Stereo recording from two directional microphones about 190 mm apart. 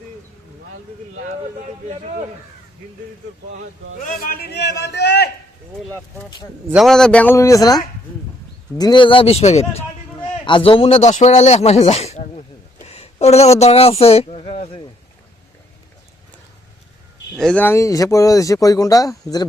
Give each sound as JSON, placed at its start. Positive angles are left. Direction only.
{"t": 1.9, "sound": "speech", "side_deg": -35}
{"t": 4.0, "sound": "a man's voice", "side_deg": 50}
{"t": 6.7, "sound": "speech", "side_deg": 0}
{"t": 17.3, "sound": "speech", "side_deg": 5}